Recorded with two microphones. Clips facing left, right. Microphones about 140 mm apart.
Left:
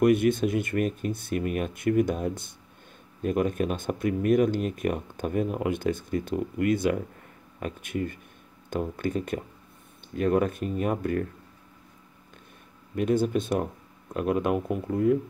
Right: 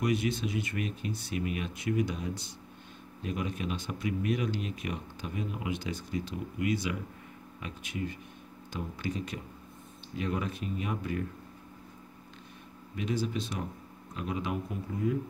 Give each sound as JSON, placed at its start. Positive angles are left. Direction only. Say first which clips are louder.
{"t": 0.0, "sound": "speech", "louder": "left 9 dB", "side_deg": 55}
{"t": 12.9, "sound": "speech", "louder": "left 8 dB", "side_deg": 50}